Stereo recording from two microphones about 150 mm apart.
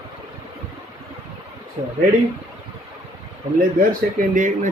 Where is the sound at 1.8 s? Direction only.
35° right (ahead or behind).